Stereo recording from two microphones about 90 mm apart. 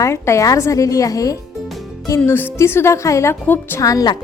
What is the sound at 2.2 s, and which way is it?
Speech, 25° left (ahead or behind).